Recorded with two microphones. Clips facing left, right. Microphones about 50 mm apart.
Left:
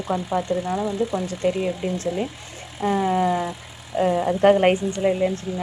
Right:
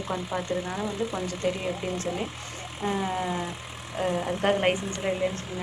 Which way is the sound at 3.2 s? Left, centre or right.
Left.